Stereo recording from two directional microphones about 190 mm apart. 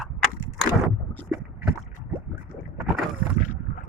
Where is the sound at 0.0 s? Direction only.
5° left (ahead or behind).